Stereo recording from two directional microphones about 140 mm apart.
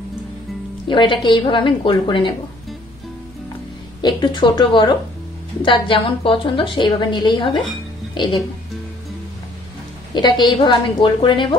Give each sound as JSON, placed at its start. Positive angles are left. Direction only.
{"t": 0.8, "sound": "a woman's voice", "side_deg": 35}
{"t": 4.0, "sound": "a woman's voice", "side_deg": 35}
{"t": 10.1, "sound": "a woman's voice", "side_deg": 35}